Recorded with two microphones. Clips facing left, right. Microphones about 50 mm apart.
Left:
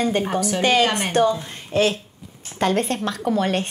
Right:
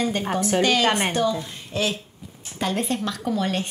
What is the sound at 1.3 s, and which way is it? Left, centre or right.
A woman's voice, left.